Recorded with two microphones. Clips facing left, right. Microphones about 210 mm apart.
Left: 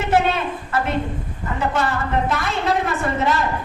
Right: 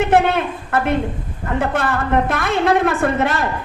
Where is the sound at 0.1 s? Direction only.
55° right (ahead or behind).